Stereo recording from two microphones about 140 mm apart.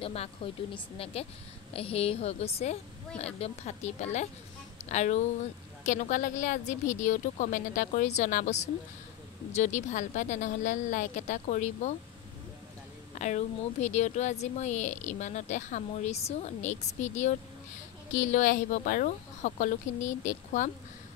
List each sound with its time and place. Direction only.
0.0 s speech: 45° left (ahead or behind); by 11.9 s 60° left (ahead or behind)
13.2 s speech: 55° left (ahead or behind)